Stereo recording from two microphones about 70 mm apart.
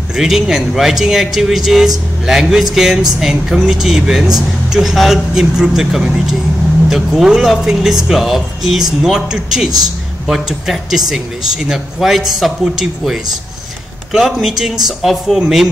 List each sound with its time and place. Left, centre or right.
0.1 s speech: centre